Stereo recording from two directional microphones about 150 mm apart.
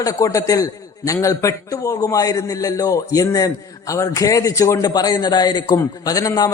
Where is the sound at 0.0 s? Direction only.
20° left (ahead or behind).